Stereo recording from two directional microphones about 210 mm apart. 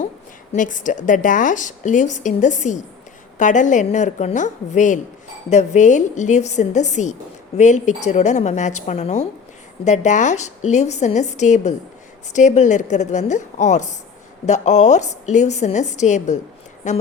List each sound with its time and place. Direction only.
0.5 s a woman's voice: 40° left (ahead or behind)